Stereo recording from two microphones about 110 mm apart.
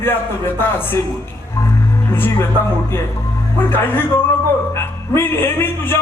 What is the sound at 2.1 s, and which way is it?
Speech, 20° left (ahead or behind).